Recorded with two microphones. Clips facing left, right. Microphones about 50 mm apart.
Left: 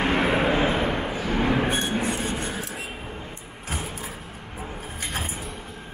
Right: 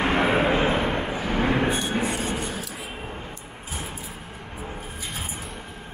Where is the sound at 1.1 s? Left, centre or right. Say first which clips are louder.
Even; centre.